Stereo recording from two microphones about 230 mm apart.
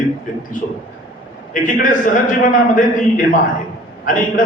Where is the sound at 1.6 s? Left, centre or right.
Left.